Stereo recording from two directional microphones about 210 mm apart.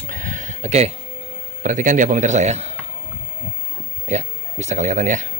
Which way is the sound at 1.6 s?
35° right (ahead or behind).